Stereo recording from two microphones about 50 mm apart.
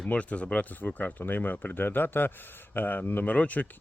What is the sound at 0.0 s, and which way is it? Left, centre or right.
Speech, left.